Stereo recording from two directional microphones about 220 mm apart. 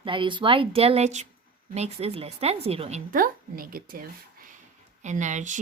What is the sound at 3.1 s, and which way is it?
Speech, 40° right (ahead or behind).